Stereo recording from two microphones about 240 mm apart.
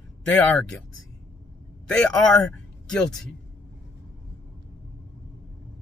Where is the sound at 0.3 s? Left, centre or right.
Centre.